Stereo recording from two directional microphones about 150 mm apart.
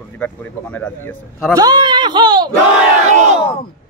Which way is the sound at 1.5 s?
25° right (ahead or behind).